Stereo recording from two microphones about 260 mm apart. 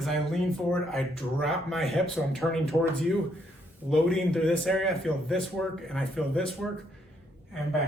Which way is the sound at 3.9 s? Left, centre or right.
Centre.